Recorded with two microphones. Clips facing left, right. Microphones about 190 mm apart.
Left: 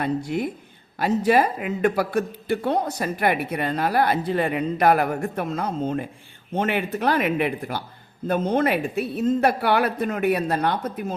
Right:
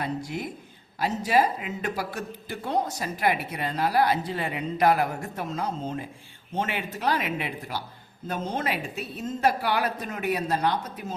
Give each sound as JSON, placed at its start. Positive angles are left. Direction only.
{"t": 0.0, "sound": "speech", "side_deg": 60}